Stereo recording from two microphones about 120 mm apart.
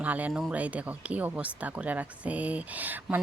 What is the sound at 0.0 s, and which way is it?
Speech, 10° right (ahead or behind).